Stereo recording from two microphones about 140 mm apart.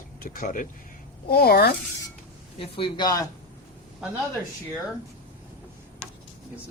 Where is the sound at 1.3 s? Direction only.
90° left.